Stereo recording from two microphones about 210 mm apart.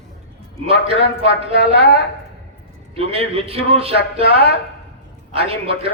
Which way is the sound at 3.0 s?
25° right (ahead or behind).